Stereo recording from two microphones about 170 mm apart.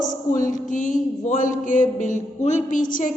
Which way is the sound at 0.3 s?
50° left (ahead or behind).